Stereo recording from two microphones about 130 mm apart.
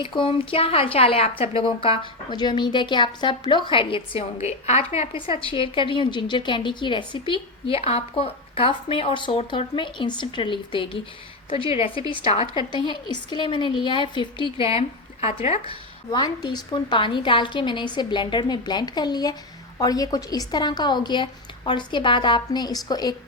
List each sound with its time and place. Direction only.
0.0 s a woman's voice: 40° left (ahead or behind)
12.7 s a woman's voice: 35° left (ahead or behind)
16.1 s a woman's voice: 35° left (ahead or behind)